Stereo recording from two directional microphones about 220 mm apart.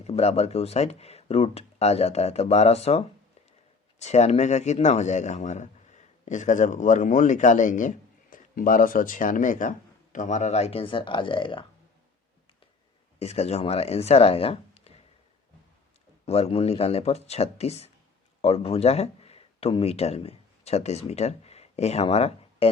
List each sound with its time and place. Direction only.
0.0 s speech: 30° left (ahead or behind)
4.0 s a man's voice: 30° left (ahead or behind)
13.1 s speech: 30° left (ahead or behind)
16.2 s speech: 30° left (ahead or behind)